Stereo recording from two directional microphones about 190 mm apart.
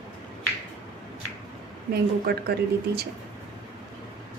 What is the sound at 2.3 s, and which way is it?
Speech, 55° right (ahead or behind).